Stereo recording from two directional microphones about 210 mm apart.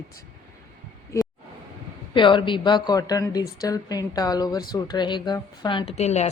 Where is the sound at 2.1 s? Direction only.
25° left (ahead or behind).